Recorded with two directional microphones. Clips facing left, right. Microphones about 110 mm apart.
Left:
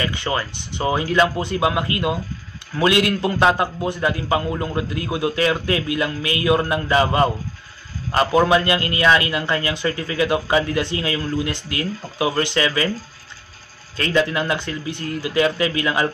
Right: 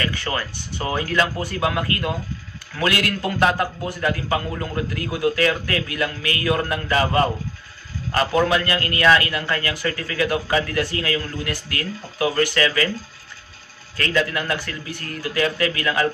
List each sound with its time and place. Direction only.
0.0 s a man's voice: 20° left (ahead or behind)
13.9 s a man's voice: 25° left (ahead or behind)